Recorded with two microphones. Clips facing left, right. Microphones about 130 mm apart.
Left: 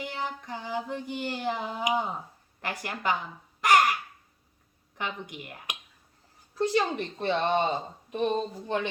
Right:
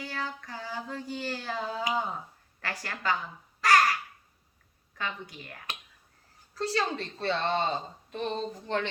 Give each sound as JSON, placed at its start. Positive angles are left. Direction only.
{"t": 0.0, "sound": "child singing", "side_deg": 20}
{"t": 4.9, "sound": "child singing", "side_deg": 20}
{"t": 6.5, "sound": "speech", "side_deg": 15}